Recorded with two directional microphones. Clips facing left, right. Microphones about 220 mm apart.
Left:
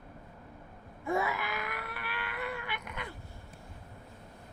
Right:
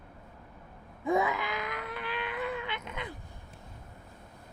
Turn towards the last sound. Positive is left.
turn(degrees=-20)  # may be behind; listen again after turning